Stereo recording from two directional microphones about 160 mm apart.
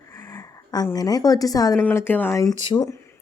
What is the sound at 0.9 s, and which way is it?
A woman's voice, 25° left (ahead or behind).